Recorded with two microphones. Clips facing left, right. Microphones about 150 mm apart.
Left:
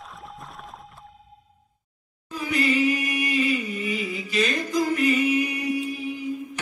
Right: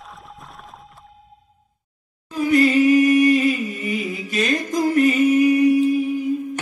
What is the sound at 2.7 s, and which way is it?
Music, 45° right (ahead or behind).